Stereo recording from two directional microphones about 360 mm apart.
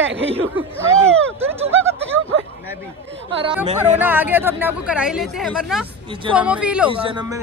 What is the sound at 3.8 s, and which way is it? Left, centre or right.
Speech, centre.